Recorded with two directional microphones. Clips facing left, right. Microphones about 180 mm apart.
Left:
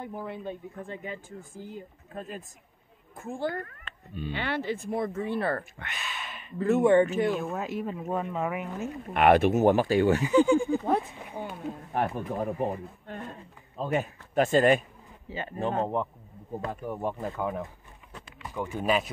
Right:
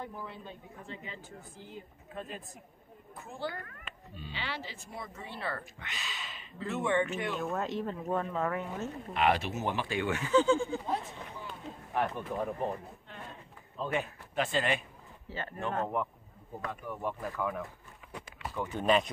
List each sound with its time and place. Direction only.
0.2 s speech: 55° left (ahead or behind)
4.1 s speech: 55° left (ahead or behind); by 7.3 s 35° left (ahead or behind)
7.3 s speech: 10° left (ahead or behind)
9.1 s speech: 55° left (ahead or behind); by 10.2 s 40° left (ahead or behind)
10.2 s speech: 15° left (ahead or behind)
10.9 s a man's voice: 55° left (ahead or behind)
15.2 s speech: 15° left (ahead or behind)
18.5 s speech: 10° left (ahead or behind)